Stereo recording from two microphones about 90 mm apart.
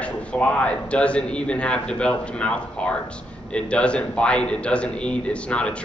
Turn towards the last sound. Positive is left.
turn(degrees=10)  # may be behind; listen again after turning